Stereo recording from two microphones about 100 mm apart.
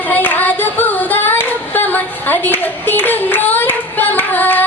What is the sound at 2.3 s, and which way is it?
Singing, 20° left (ahead or behind).